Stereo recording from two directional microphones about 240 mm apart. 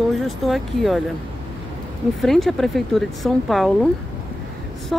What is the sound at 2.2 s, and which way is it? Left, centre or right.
Speech, centre.